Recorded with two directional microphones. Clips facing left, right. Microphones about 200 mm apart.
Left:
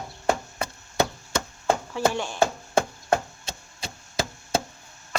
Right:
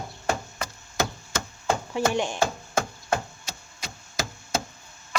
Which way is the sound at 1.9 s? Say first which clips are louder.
Right 1 dB; 20° right (ahead or behind).